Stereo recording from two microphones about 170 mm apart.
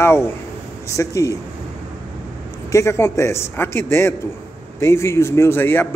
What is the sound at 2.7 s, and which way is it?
A man's voice, 15° left (ahead or behind).